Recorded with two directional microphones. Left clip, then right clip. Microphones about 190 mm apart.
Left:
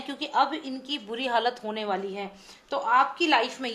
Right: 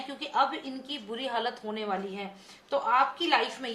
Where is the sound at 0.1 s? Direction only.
40° left (ahead or behind).